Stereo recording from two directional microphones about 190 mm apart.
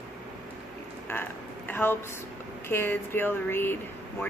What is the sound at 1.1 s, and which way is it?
Speech, 10° left (ahead or behind).